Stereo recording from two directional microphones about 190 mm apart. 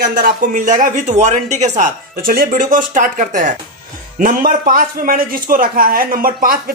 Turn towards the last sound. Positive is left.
turn(degrees=-50)  # may be behind; listen again after turning